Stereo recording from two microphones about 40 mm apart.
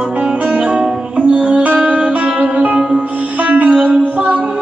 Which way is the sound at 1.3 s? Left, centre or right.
Right.